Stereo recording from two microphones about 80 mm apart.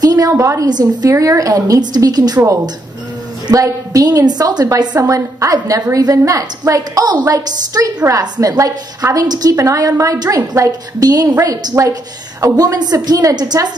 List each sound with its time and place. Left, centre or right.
0.0 s a sound: right
0.4 s a woman's voice: right
0.7 s a woman's voice: right
1.1 s a woman's voice: right
3.6 s a woman's voice: right